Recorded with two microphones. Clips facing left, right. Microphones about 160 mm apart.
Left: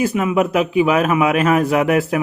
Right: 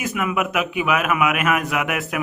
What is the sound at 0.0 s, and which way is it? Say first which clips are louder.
A man's voice: left 6 dB; 30° left (ahead or behind).